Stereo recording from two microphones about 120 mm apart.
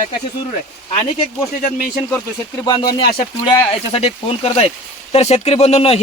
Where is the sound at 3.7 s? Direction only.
55° left (ahead or behind).